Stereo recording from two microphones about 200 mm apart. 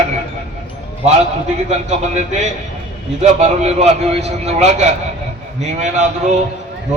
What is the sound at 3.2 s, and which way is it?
A man's voice, 35° right (ahead or behind).